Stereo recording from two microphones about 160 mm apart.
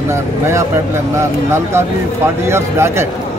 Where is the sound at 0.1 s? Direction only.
15° right (ahead or behind).